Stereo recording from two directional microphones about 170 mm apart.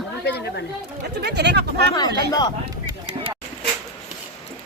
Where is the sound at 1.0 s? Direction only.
75° right (ahead or behind).